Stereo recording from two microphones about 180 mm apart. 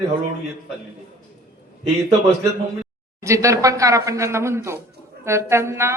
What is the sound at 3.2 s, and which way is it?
A woman's voice, 15° right (ahead or behind).